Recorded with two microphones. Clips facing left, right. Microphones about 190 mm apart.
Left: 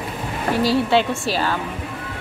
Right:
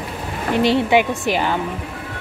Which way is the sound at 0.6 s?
20° right (ahead or behind).